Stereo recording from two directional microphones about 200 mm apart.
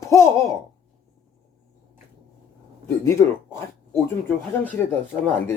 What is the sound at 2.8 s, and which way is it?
Speech, 15° left (ahead or behind).